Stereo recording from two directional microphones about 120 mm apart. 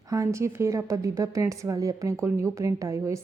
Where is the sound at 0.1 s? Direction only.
25° right (ahead or behind).